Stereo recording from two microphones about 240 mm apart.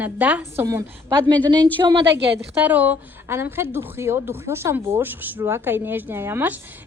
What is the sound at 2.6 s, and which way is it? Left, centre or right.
A woman's voice, centre.